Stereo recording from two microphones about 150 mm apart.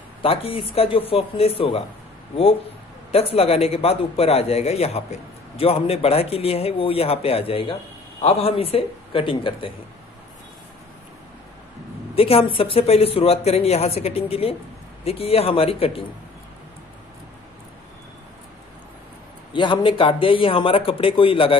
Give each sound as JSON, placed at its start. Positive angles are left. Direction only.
{"t": 0.2, "sound": "speech", "side_deg": 40}
{"t": 3.1, "sound": "speech", "side_deg": 40}
{"t": 12.2, "sound": "speech", "side_deg": 40}
{"t": 19.5, "sound": "speech", "side_deg": 35}